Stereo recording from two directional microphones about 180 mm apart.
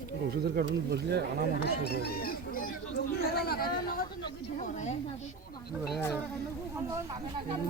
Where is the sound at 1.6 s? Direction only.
60° left (ahead or behind).